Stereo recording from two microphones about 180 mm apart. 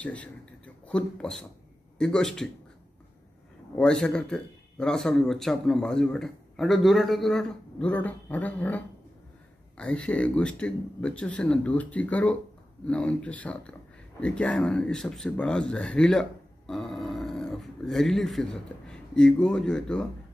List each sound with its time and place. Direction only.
0.0 s speech: 5° left (ahead or behind)
3.7 s speech: 5° left (ahead or behind)